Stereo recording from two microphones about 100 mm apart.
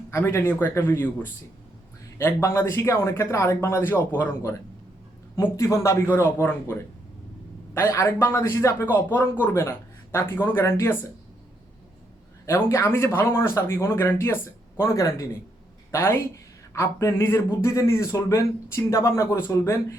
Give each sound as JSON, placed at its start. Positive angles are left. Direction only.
{"t": 0.1, "sound": "speech", "side_deg": 25}
{"t": 5.5, "sound": "speech", "side_deg": 30}
{"t": 6.1, "sound": "speech", "side_deg": 20}
{"t": 12.5, "sound": "speech", "side_deg": 25}
{"t": 14.8, "sound": "speech", "side_deg": 35}